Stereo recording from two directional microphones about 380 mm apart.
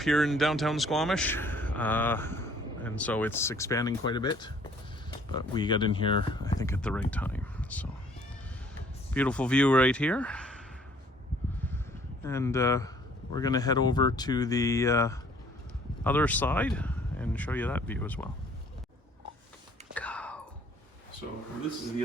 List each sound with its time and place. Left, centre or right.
0.0 s a man's voice: centre
9.1 s a man's voice: centre
12.2 s a man's voice: centre
19.9 s whispering: centre